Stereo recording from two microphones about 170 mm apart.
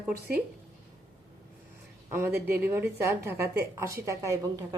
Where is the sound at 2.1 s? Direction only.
15° right (ahead or behind).